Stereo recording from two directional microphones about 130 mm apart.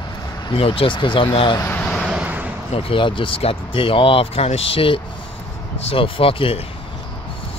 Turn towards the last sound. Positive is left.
turn(degrees=45)  # may be behind; listen again after turning